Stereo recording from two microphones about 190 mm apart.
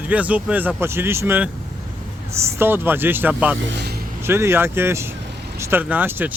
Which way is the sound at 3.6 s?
60° right (ahead or behind).